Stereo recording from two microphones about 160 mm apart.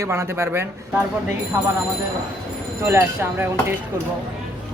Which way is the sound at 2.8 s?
15° right (ahead or behind).